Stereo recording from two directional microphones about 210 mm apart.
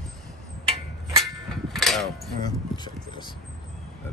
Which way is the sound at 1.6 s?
Centre (ahead or behind).